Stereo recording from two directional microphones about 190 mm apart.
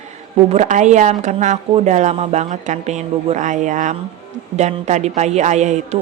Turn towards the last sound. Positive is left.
turn(degrees=-35)  # may be behind; listen again after turning